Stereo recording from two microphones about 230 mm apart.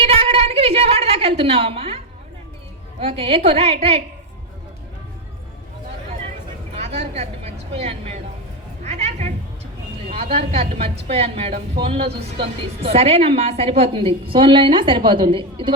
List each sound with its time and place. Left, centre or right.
0.0 s a sound: right
3.0 s a woman's voice: right
6.7 s speech: right
8.8 s cat: right
10.1 s a woman's voice: right